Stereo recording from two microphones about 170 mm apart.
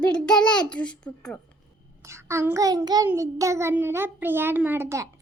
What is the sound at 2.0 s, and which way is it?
Child singing, 15° right (ahead or behind).